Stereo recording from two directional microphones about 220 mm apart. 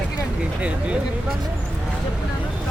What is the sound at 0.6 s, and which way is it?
Speech, 5° right (ahead or behind).